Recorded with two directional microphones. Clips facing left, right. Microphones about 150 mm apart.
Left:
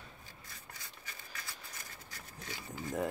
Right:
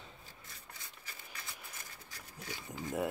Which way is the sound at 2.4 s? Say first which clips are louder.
Even; 10° right (ahead or behind).